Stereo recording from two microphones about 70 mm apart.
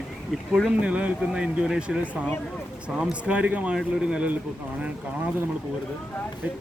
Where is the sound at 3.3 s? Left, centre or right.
Centre.